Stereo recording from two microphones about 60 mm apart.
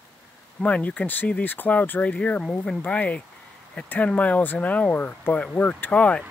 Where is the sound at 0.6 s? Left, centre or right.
Left.